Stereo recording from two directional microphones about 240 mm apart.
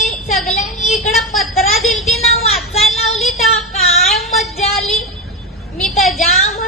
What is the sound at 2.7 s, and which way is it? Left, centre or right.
Child singing, left.